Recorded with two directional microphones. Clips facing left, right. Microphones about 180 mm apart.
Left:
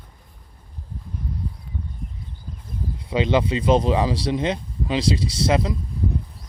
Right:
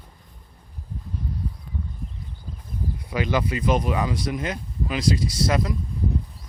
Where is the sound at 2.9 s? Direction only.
25° left (ahead or behind).